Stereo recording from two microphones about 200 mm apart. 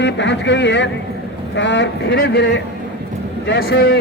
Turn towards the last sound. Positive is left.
turn(degrees=55)  # may be behind; listen again after turning